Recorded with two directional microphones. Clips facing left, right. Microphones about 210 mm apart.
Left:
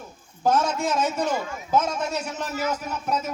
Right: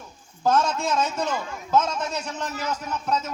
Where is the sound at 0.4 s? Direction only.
10° left (ahead or behind).